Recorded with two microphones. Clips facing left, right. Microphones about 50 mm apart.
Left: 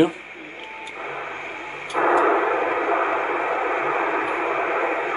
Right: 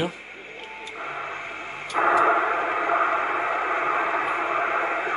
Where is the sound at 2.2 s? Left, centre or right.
Centre.